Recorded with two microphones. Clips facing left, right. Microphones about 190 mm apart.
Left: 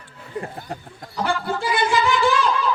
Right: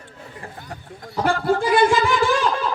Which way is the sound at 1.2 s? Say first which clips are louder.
Right 5 dB; 50° right (ahead or behind).